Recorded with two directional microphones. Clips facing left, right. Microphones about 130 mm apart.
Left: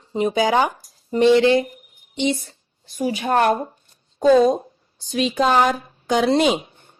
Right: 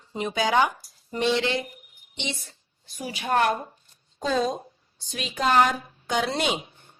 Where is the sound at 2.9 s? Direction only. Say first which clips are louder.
Left 5 dB; 40° left (ahead or behind).